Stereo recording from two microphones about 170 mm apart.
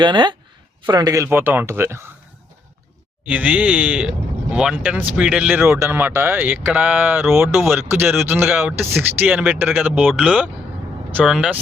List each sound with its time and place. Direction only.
0.0 s speech: 25° right (ahead or behind)
3.2 s speech: 10° right (ahead or behind)
7.5 s speech: centre (ahead or behind)
7.8 s speech: 15° right (ahead or behind)